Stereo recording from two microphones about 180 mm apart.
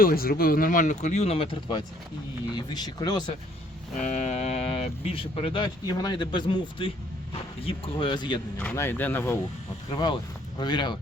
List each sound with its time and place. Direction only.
0.0 s speech: 55° left (ahead or behind); by 3.2 s 20° left (ahead or behind)
4.0 s speech: 40° left (ahead or behind)
8.5 s speech: 10° left (ahead or behind)
9.9 s speech: 25° left (ahead or behind)